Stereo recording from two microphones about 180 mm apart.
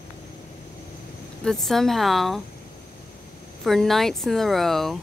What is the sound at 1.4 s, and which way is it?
Speech, centre (ahead or behind).